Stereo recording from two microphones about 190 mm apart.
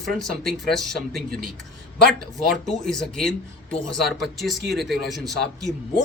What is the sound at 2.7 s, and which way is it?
Speech, centre (ahead or behind).